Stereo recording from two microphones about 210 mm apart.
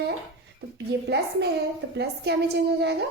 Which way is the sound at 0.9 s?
50° right (ahead or behind).